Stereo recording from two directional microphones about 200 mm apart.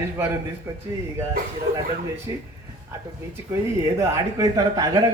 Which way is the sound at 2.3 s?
20° right (ahead or behind).